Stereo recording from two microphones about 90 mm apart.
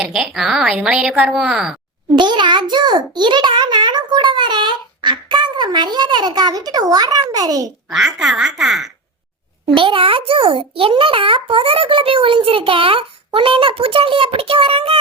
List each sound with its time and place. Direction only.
0.0 s a woman's voice: 5° right (ahead or behind)
2.1 s a child's voice: 60° right (ahead or behind)
7.9 s a woman's voice: 5° right (ahead or behind)
9.6 s a child's voice: 70° right (ahead or behind); by 14.9 s 90° right